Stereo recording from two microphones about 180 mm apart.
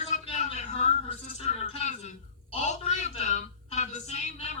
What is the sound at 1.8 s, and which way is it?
A man's voice, 40° left (ahead or behind).